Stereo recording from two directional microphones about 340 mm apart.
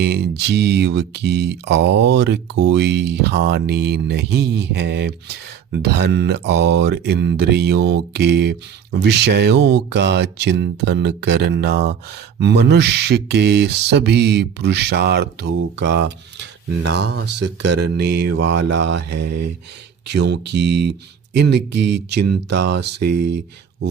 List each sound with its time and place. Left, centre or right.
0.0 s speech: right